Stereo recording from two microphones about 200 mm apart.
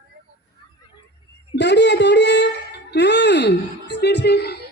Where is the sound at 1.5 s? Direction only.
60° left (ahead or behind).